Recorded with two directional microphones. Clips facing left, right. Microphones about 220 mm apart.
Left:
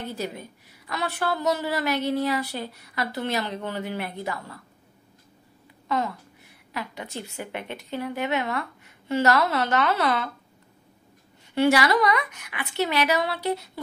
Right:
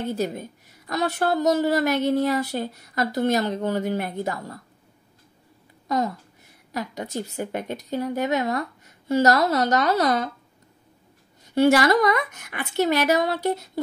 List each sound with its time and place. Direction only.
0.1 s speech: 45° right (ahead or behind)
5.9 s a woman's voice: 40° right (ahead or behind)
11.5 s speech: 45° right (ahead or behind)